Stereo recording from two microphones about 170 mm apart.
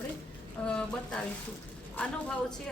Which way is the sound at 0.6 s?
5° left (ahead or behind).